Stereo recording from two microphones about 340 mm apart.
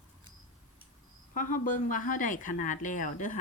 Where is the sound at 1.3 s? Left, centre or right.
Left.